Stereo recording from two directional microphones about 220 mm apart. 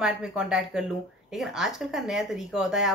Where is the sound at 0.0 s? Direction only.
5° right (ahead or behind).